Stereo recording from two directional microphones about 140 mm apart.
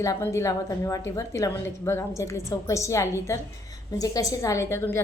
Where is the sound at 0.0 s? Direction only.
20° left (ahead or behind).